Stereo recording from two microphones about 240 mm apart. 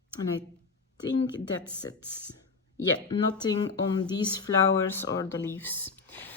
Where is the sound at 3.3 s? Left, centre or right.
Centre.